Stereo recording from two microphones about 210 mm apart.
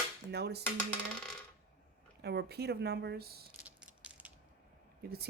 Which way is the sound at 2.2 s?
50° right (ahead or behind).